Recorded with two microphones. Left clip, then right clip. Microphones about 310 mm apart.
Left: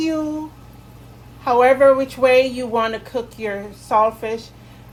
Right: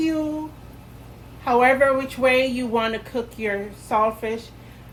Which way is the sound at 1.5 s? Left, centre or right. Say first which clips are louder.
Left 4 dB; left.